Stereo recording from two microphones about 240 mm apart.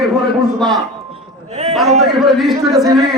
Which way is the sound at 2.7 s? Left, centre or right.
Centre.